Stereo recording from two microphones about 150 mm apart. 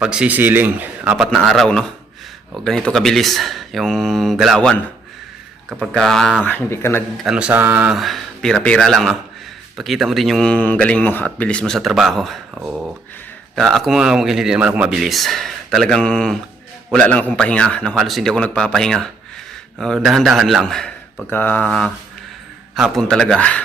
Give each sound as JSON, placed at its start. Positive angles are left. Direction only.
{"t": 0.0, "sound": "speech", "side_deg": -5}
{"t": 1.1, "sound": "speech", "side_deg": 0}
{"t": 6.4, "sound": "speech", "side_deg": 15}
{"t": 7.3, "sound": "speech", "side_deg": -5}
{"t": 7.9, "sound": "speech", "side_deg": 0}